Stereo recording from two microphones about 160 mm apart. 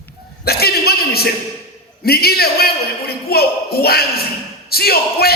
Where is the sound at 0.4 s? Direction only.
75° left (ahead or behind).